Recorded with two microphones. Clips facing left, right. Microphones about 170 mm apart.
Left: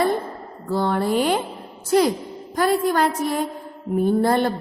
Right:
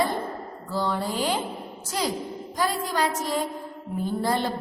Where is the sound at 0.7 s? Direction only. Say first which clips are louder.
Left 7 dB; 60° left (ahead or behind).